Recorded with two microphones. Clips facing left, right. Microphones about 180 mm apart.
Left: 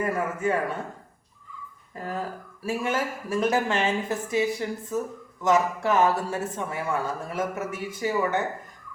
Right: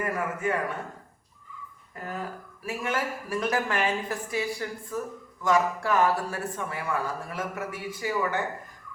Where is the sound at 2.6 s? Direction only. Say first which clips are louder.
Left 3 dB; 25° left (ahead or behind).